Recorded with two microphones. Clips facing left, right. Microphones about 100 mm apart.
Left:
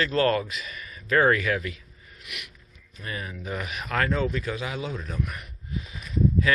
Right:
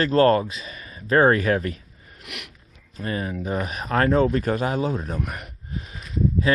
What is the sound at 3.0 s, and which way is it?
Speech, 35° right (ahead or behind).